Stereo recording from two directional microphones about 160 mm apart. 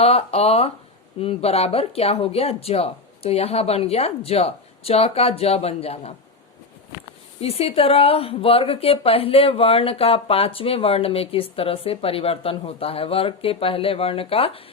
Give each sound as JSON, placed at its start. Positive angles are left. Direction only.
{"t": 0.0, "sound": "a woman's voice", "side_deg": 40}
{"t": 7.4, "sound": "a woman's voice", "side_deg": 40}